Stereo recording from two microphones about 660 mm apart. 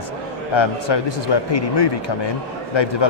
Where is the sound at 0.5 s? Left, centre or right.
Left.